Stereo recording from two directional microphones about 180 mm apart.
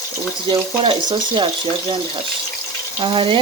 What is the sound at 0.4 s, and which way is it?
Speech, 25° right (ahead or behind).